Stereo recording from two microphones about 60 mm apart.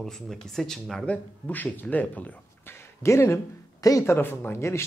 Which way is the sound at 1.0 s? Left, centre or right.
Left.